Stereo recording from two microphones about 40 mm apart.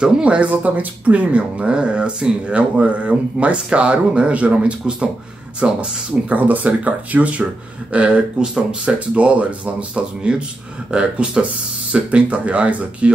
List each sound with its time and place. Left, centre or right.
0.0 s speech: right
7.9 s speech: right